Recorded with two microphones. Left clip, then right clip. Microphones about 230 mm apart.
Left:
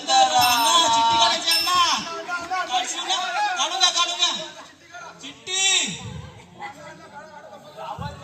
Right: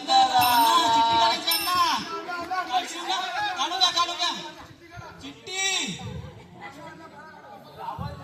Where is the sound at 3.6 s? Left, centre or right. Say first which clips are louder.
Left 1 dB; centre.